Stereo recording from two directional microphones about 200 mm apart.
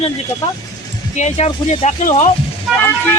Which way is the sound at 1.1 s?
35° left (ahead or behind).